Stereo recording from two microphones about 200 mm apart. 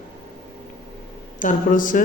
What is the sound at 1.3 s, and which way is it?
Speech, 40° left (ahead or behind).